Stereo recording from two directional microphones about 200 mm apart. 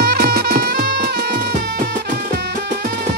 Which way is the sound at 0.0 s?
50° right (ahead or behind).